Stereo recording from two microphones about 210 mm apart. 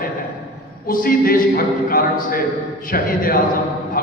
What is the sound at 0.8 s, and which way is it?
A man's voice, 40° left (ahead or behind).